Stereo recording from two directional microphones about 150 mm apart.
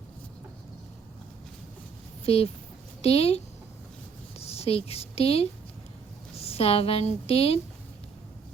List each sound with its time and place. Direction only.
2.2 s a woman's voice: 40° left (ahead or behind)